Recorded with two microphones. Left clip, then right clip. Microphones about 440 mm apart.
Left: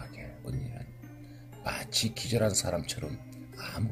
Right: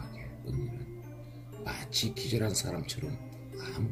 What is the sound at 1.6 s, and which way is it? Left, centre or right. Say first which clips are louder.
Speech: left 2 dB; centre.